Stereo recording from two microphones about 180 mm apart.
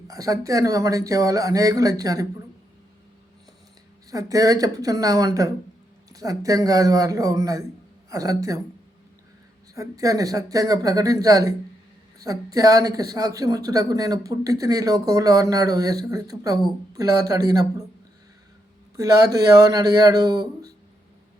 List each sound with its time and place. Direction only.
0.1 s speech: 20° right (ahead or behind)
4.1 s speech: 20° right (ahead or behind)
9.7 s speech: 20° right (ahead or behind)
18.9 s a man's voice: 20° right (ahead or behind)